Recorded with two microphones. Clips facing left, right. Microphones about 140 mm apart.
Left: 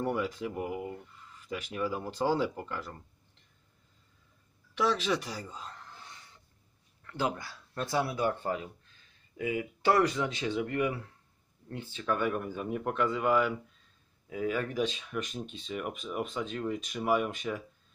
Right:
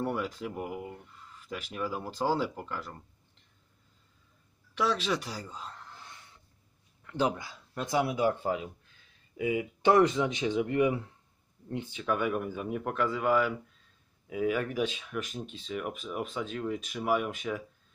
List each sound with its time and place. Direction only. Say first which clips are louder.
0.0 s speech: left 1 dB; centre (ahead or behind)
5.4 s a sound: right 1 dB; 10° left (ahead or behind)
7.0 s speech: right 3 dB; 15° right (ahead or behind)